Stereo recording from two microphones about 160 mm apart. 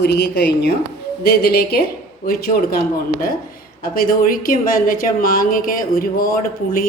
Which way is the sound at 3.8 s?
65° left (ahead or behind).